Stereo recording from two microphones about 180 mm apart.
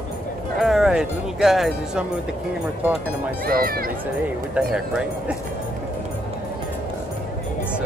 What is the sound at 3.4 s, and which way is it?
Speech, 55° right (ahead or behind).